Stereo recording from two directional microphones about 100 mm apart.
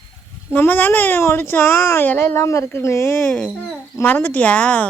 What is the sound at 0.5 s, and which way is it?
Speech, 20° left (ahead or behind).